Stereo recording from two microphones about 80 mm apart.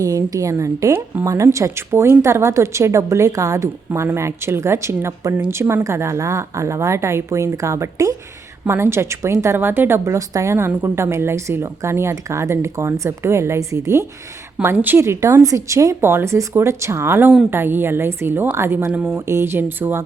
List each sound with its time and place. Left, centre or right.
0.0 s a woman's voice: right
8.6 s speech: right
14.6 s a woman's voice: right
16.0 s a woman's voice: right
18.9 s a woman's voice: right
19.1 s speech: right